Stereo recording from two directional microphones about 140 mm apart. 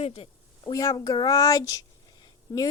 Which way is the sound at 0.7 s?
30° left (ahead or behind).